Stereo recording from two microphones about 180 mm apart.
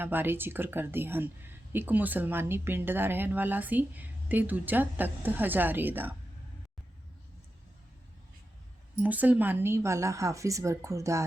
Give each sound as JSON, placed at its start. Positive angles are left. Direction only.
{"t": 0.0, "sound": "a woman's voice", "side_deg": -10}
{"t": 9.0, "sound": "a woman's voice", "side_deg": -10}